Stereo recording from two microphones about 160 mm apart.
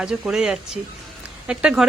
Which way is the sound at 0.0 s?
5° right (ahead or behind).